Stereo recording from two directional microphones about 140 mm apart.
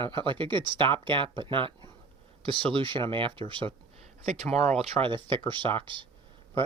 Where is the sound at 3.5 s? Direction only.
35° right (ahead or behind).